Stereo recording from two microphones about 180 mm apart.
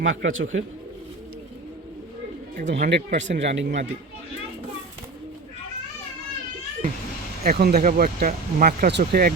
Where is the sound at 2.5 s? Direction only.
40° right (ahead or behind).